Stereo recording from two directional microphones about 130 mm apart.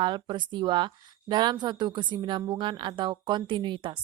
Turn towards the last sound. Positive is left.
turn(degrees=-40)  # may be behind; listen again after turning